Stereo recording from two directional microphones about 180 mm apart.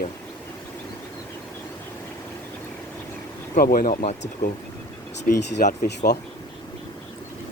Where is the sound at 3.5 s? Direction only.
50° left (ahead or behind).